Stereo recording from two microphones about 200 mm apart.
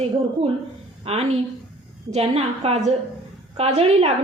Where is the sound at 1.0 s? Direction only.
30° right (ahead or behind).